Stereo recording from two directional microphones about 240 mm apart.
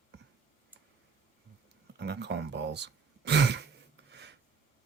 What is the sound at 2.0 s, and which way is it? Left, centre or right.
Speech, right.